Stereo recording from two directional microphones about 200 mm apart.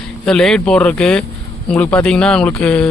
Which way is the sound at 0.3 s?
5° left (ahead or behind).